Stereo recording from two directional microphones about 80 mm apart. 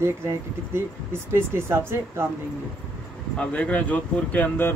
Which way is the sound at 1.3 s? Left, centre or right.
Right.